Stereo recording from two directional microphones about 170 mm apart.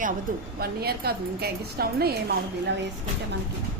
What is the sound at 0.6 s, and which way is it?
A woman's voice, 65° right (ahead or behind).